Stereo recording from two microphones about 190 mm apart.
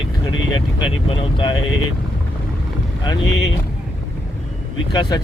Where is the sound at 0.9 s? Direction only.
30° left (ahead or behind).